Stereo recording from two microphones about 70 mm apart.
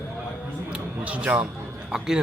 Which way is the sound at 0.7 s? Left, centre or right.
Centre.